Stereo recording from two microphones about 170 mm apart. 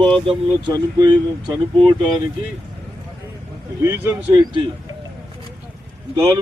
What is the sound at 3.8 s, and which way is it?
Speech, 15° right (ahead or behind).